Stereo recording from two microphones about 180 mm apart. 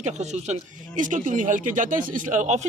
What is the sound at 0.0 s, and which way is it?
Speech, 40° right (ahead or behind).